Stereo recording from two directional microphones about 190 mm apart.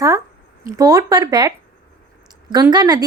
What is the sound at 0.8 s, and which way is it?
A woman's voice, 20° right (ahead or behind).